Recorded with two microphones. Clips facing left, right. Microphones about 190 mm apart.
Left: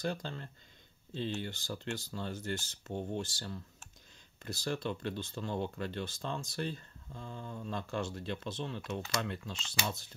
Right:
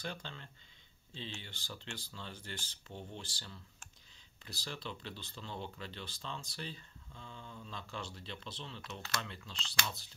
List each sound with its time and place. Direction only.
0.0 s speech: 40° left (ahead or behind)